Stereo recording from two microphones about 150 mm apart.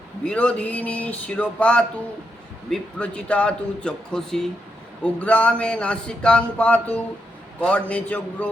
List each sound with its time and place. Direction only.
0.3 s a man's voice: 10° left (ahead or behind)